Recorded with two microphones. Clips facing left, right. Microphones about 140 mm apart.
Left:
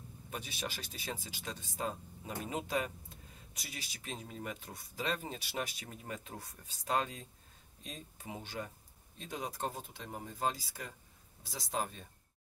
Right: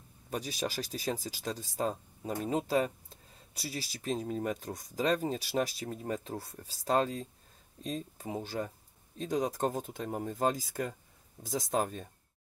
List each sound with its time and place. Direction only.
0.3 s speech: 40° right (ahead or behind)